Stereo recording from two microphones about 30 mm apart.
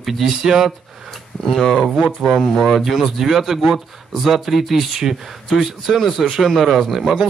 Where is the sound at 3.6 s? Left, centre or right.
Centre.